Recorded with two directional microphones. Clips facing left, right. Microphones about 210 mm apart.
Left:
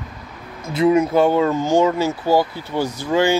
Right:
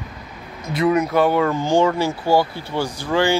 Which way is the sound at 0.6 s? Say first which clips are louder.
Left 3 dB; 25° left (ahead or behind).